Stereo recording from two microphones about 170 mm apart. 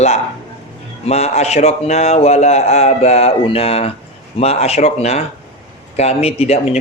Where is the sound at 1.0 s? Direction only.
40° left (ahead or behind).